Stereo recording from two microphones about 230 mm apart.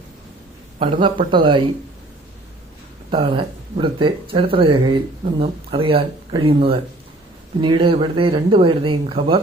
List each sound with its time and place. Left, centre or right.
0.8 s speech: right
3.1 s speech: right